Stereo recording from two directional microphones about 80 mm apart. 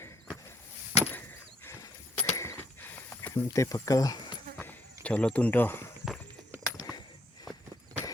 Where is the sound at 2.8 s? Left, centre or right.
Left.